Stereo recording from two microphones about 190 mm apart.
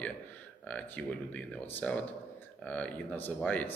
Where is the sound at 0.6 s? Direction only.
5° left (ahead or behind).